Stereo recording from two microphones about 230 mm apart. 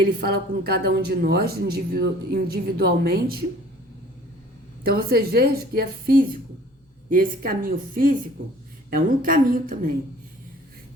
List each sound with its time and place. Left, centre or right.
0.0 s speech: right
4.8 s a woman's voice: right